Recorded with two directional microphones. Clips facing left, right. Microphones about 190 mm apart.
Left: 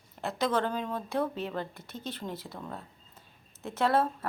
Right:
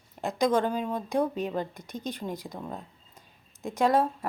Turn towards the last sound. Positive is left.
turn(degrees=-15)  # may be behind; listen again after turning